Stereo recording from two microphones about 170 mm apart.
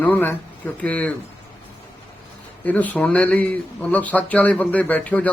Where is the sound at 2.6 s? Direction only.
10° left (ahead or behind).